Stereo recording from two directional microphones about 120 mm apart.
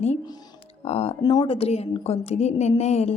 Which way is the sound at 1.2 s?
35° left (ahead or behind).